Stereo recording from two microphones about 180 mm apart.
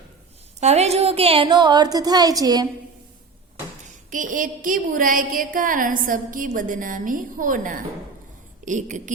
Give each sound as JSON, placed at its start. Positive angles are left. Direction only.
{"t": 0.6, "sound": "a woman's voice", "side_deg": -35}
{"t": 3.8, "sound": "a woman's voice", "side_deg": -45}